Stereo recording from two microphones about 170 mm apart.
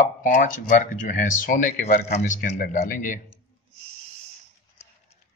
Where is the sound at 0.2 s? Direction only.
50° left (ahead or behind).